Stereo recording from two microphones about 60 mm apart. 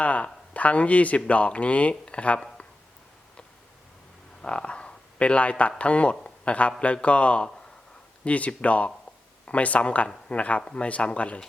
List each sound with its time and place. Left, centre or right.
0.0 s speech: left
4.4 s speech: centre